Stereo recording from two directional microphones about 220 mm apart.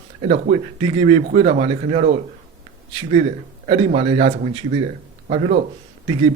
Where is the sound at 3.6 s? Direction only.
30° right (ahead or behind).